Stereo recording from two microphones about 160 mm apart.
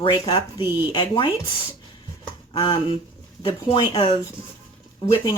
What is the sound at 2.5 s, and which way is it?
Speech, 30° left (ahead or behind).